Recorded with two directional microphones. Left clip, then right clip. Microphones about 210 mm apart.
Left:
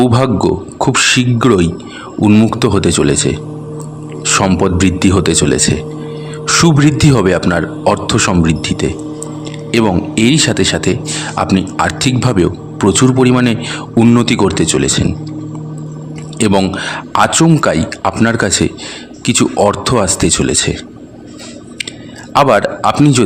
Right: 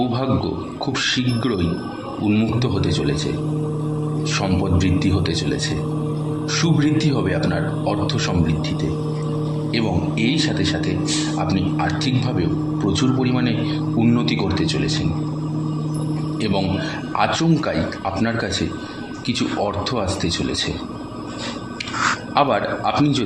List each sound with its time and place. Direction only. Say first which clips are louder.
0.0 s speech: left 10 dB; 55° left (ahead or behind)
4.3 s speech: left 12 dB; 55° left (ahead or behind)
16.4 s speech: left 11 dB; 50° left (ahead or behind)
22.4 s speech: left 10 dB; 50° left (ahead or behind)